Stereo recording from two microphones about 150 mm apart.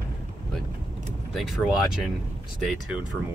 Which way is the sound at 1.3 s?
Centre (ahead or behind).